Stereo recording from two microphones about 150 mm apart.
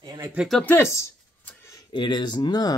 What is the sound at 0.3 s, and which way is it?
Speech, centre (ahead or behind).